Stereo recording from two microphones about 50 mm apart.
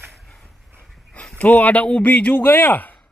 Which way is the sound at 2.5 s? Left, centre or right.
Left.